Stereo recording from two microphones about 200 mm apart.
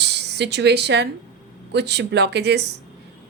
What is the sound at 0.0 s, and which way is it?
A woman's voice, 55° right (ahead or behind).